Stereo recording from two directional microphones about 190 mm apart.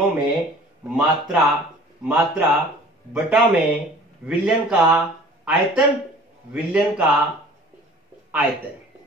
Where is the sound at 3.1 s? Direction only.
Centre (ahead or behind).